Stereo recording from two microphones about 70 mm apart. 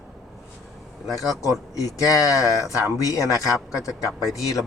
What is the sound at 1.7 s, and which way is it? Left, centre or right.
Speech, left.